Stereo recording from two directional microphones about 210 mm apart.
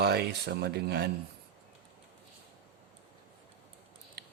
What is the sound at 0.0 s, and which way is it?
Speech, 50° right (ahead or behind).